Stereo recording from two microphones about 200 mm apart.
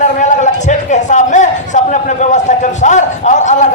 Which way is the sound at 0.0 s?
35° left (ahead or behind).